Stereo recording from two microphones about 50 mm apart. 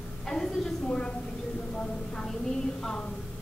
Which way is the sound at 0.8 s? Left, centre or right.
Centre.